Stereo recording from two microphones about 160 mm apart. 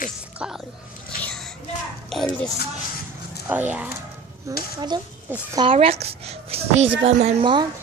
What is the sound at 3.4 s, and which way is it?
Speech, 10° right (ahead or behind).